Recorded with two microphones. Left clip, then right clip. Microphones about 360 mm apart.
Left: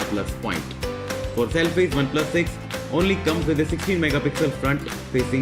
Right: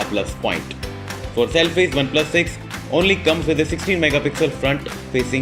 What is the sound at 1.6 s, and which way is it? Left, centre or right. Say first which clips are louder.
Speech: right 4 dB; centre.